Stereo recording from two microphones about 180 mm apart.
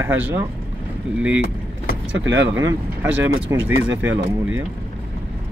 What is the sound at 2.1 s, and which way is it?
Speech, 90° right.